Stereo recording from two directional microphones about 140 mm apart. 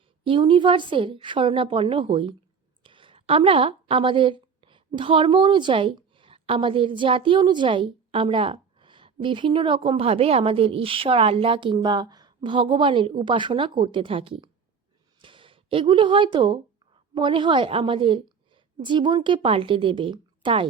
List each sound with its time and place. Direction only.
0.3 s a woman's voice: 35° right (ahead or behind)